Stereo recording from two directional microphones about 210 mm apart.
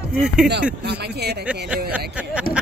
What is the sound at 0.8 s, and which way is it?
Speech, 50° right (ahead or behind).